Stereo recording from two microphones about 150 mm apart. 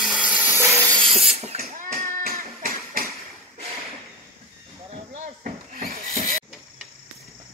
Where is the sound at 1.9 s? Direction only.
70° right (ahead or behind).